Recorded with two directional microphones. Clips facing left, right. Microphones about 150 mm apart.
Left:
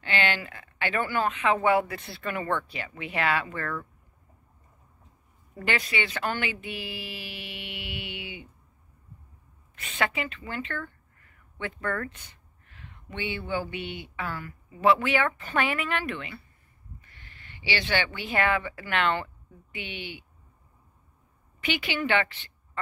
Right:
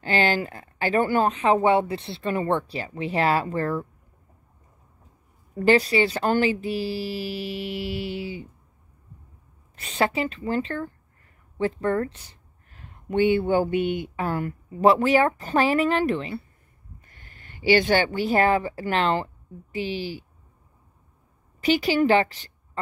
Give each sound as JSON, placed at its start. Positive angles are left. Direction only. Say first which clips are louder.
{"t": 0.0, "sound": "speech", "louder": "right 6 dB", "side_deg": -40}
{"t": 5.6, "sound": "speech", "louder": "right 11 dB", "side_deg": -35}
{"t": 9.8, "sound": "speech", "louder": "right 6 dB", "side_deg": -35}
{"t": 17.0, "sound": "speech", "louder": "right 2 dB", "side_deg": -45}
{"t": 21.5, "sound": "speech", "louder": "right 9 dB", "side_deg": -35}